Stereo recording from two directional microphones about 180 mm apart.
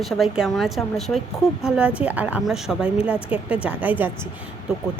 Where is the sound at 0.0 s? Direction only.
Centre (ahead or behind).